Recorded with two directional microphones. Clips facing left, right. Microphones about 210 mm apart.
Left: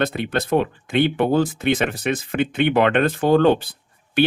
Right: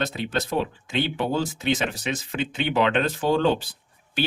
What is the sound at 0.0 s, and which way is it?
Speech, 60° left (ahead or behind).